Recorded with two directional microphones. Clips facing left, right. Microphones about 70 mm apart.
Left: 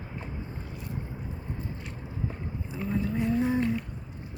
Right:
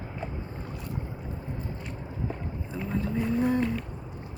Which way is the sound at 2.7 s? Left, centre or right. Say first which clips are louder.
Left 1 dB; centre.